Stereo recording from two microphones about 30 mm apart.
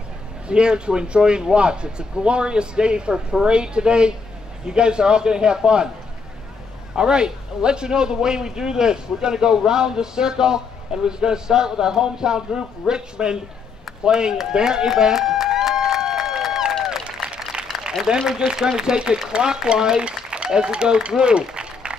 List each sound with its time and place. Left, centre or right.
0.5 s a man's voice: right
7.0 s a man's voice: right
14.5 s a sound: right
18.2 s a man's voice: centre
21.2 s run: right